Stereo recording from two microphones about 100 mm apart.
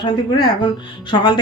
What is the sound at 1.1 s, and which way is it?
Speech, 50° left (ahead or behind).